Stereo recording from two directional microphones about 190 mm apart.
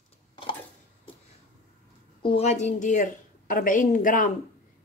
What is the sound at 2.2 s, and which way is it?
Speech, 35° left (ahead or behind).